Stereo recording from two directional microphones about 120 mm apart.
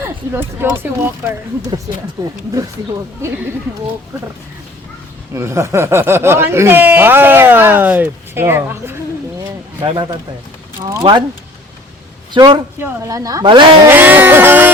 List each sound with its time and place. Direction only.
0.0 s speech: 20° right (ahead or behind)
2.2 s speech: 35° right (ahead or behind)
5.3 s speech: 25° right (ahead or behind)
9.8 s speech: 35° right (ahead or behind)
12.3 s a man's voice: 40° right (ahead or behind)
13.1 s speech: 30° right (ahead or behind)
13.5 s speech: 40° right (ahead or behind)
13.8 s music: 15° right (ahead or behind)